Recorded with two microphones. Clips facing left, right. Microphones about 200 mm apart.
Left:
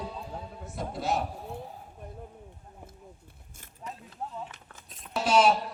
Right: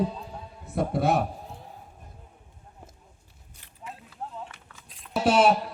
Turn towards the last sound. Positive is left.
turn(degrees=-60)  # may be behind; listen again after turning